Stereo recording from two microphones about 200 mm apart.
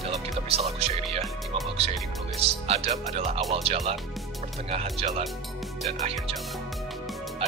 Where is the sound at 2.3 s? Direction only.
30° right (ahead or behind).